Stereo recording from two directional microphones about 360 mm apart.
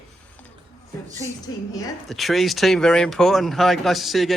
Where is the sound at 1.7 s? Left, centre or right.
Centre.